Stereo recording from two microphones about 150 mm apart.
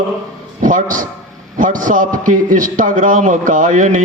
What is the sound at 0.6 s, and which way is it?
A man's voice, 60° right (ahead or behind).